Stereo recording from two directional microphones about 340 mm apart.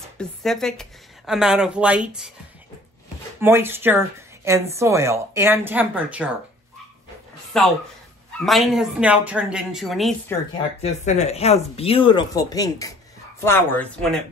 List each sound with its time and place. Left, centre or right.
0.2 s a woman's voice: centre
3.3 s a woman's voice: centre
7.5 s a woman's voice: centre
10.8 s speech: centre